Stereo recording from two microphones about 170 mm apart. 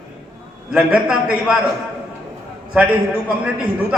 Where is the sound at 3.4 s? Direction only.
10° right (ahead or behind).